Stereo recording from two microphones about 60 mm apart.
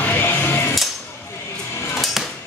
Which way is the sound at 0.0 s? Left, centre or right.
Left.